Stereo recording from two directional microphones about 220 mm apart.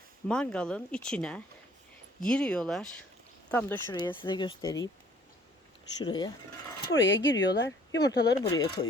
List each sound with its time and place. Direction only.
0.3 s speech: 5° left (ahead or behind)
6.0 s speech: 20° left (ahead or behind)
6.9 s speech: 55° left (ahead or behind)
8.0 s speech: 15° left (ahead or behind)